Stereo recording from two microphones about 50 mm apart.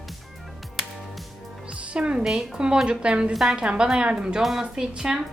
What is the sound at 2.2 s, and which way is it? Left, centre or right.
A woman's voice, centre.